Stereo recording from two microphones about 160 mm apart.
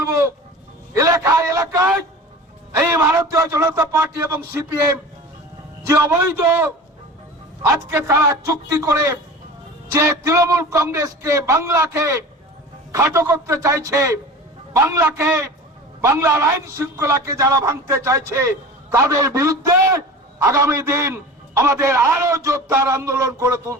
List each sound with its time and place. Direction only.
0.0 s livestock: 20° right (ahead or behind)
0.9 s a sound: 20° right (ahead or behind)
2.7 s a man's voice: 15° right (ahead or behind)
7.9 s a man's voice: 15° right (ahead or behind)